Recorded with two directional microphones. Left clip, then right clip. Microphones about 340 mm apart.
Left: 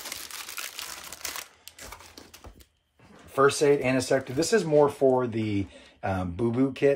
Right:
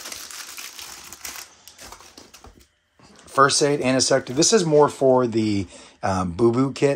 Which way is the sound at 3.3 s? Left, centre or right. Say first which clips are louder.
Right 4 dB; right.